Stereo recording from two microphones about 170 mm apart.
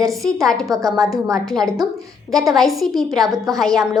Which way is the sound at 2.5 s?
Centre (ahead or behind).